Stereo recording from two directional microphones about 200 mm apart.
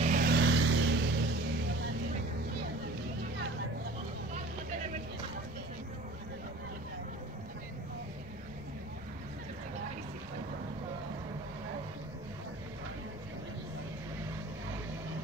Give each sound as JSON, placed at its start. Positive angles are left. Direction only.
{"t": 0.0, "sound": "vehicle", "side_deg": -45}